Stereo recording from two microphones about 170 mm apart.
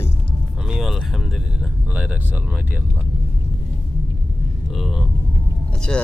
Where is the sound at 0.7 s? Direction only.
Centre (ahead or behind).